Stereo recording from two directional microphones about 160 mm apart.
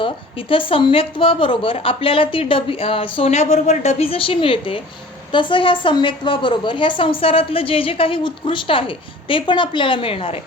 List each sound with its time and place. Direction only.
0.0 s a woman's voice: 35° left (ahead or behind)